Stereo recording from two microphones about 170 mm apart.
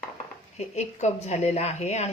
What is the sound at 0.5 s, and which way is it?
Speech, 40° left (ahead or behind).